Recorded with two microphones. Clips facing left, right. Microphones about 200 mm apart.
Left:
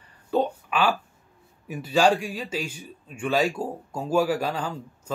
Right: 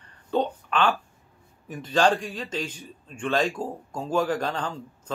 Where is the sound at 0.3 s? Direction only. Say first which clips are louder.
Left 1 dB; 5° left (ahead or behind).